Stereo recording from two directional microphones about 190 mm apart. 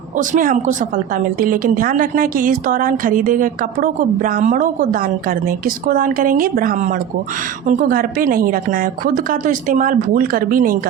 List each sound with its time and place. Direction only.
0.2 s a woman's voice: 45° right (ahead or behind)